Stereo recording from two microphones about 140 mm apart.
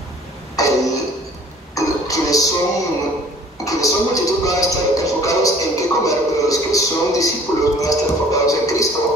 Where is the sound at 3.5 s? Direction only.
25° left (ahead or behind).